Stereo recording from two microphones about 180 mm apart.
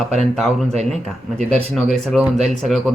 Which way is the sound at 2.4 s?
40° right (ahead or behind).